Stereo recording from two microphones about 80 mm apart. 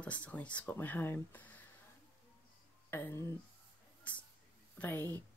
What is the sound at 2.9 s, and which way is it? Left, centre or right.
Speech, left.